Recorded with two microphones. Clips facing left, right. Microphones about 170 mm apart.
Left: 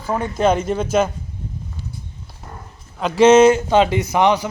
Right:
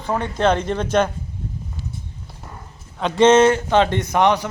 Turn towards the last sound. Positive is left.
turn(degrees=5)  # may be behind; listen again after turning